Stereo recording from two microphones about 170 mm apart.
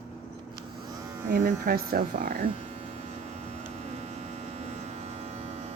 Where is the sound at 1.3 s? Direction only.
60° right (ahead or behind).